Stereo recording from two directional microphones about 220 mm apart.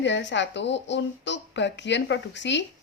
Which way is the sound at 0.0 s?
55° left (ahead or behind).